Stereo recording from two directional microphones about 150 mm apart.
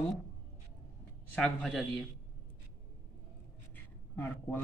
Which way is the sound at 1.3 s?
5° left (ahead or behind).